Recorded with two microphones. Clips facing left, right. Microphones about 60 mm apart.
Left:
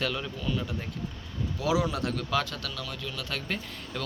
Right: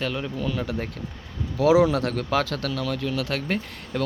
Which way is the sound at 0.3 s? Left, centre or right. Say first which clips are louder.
Right 4 dB; right.